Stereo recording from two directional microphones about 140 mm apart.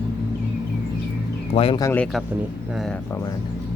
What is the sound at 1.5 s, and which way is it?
Speech, 65° left (ahead or behind).